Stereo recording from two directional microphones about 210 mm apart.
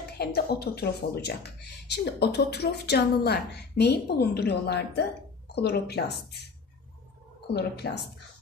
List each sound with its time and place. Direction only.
0.2 s a woman's voice: 50° left (ahead or behind)
7.5 s a woman's voice: 50° left (ahead or behind)